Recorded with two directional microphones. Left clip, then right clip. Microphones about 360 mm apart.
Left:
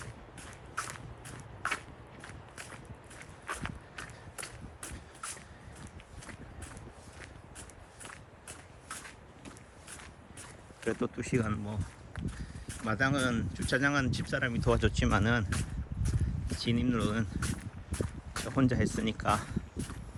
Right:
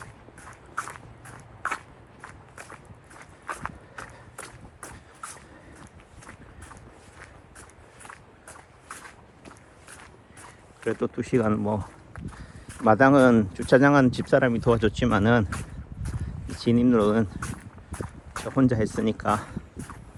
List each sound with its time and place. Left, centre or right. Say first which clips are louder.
0.0 s walk: right 3 dB; centre
3.2 s run: right 5 dB; centre
10.8 s speech: right 6 dB; centre
12.9 s speech: right 14 dB; centre
16.2 s a sound: right 9 dB; centre